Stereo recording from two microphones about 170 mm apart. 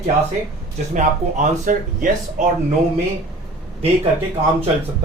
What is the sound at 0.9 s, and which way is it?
Speech, 50° right (ahead or behind).